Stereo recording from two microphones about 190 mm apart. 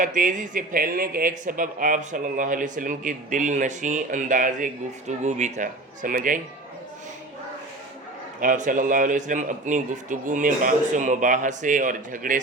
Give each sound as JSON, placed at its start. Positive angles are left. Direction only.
{"t": 0.0, "sound": "speech", "side_deg": -45}
{"t": 8.4, "sound": "speech", "side_deg": -45}